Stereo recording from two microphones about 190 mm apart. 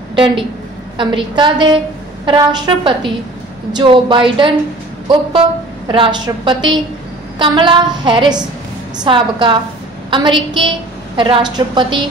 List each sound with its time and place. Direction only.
0.1 s a woman's voice: 25° right (ahead or behind)
5.9 s a woman's voice: 25° right (ahead or behind)